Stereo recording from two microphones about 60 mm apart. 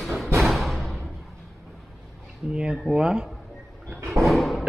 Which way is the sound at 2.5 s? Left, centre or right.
Centre.